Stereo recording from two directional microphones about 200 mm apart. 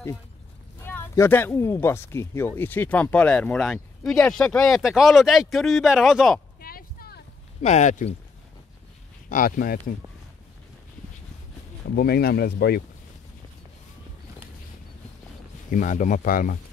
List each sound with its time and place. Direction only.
0.8 s speech: 10° left (ahead or behind)
6.6 s a sound: 50° left (ahead or behind)
7.6 s speech: 35° left (ahead or behind)
9.3 s speech: 45° left (ahead or behind)
11.9 s speech: 50° left (ahead or behind)
15.7 s speech: 40° left (ahead or behind)